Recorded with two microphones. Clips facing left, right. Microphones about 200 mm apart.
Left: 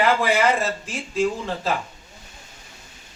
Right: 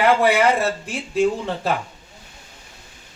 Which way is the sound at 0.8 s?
60° right (ahead or behind).